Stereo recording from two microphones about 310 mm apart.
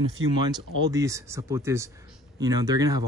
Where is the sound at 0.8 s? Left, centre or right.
Centre.